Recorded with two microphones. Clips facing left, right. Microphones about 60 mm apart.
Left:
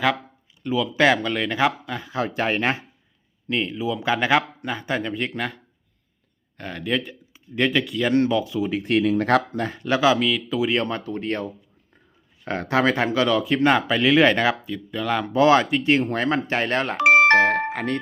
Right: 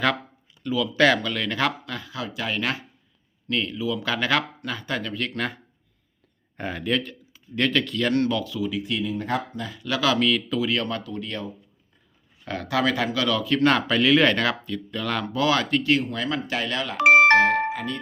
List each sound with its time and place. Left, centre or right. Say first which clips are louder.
0.6 s speech: left 1 dB; left
2.2 s speech: left 5 dB; left
3.5 s speech: left 1 dB; left
6.6 s speech: right 3 dB; centre
6.8 s speech: left 2 dB; centre; by 8.8 s left
8.8 s speech: left 8 dB; left
9.8 s speech: left 4 dB; left
10.2 s speech: even; centre
10.6 s speech: left 3 dB; left
12.5 s speech: left 3 dB; left; by 15.3 s centre
15.3 s speech: left 6 dB; left
16.0 s speech: left 5 dB; left
17.4 s speech: left 1 dB; left